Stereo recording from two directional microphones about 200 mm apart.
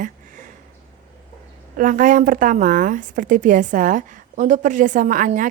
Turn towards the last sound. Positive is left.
turn(degrees=-40)  # may be behind; listen again after turning